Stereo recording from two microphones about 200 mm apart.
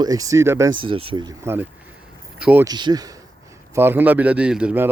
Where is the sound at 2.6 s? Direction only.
20° right (ahead or behind).